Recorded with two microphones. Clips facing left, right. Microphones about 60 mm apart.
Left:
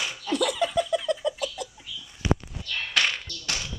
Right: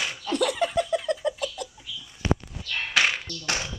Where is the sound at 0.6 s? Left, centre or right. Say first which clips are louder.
Even; right.